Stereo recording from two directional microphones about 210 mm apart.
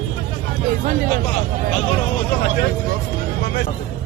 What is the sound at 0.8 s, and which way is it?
Speech, 40° right (ahead or behind).